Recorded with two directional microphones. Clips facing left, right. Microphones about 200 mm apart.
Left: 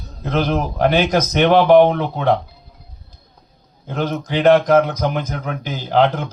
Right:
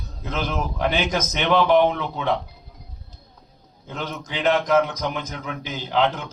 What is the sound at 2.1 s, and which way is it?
Speech, 55° left (ahead or behind).